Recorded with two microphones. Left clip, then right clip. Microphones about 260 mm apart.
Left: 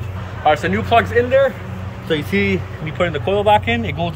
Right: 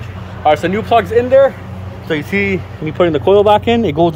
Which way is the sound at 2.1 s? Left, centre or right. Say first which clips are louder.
Right 2 dB; centre.